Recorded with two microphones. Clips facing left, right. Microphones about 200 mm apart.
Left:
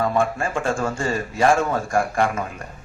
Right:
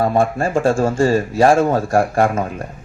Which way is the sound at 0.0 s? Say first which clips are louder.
Right 5 dB; 35° right (ahead or behind).